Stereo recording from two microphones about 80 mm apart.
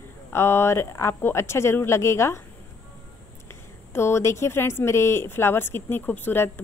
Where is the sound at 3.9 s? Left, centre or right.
Left.